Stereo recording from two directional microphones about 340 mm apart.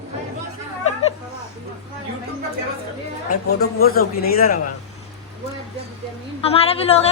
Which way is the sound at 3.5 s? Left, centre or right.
Left.